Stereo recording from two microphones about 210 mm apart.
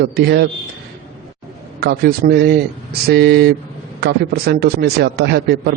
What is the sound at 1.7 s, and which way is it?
A man's voice, 50° right (ahead or behind).